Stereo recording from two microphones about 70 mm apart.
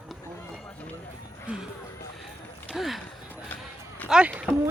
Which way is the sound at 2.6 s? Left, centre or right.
Centre.